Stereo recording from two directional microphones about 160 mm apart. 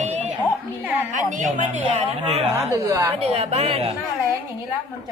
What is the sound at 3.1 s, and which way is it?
Speech, 40° right (ahead or behind).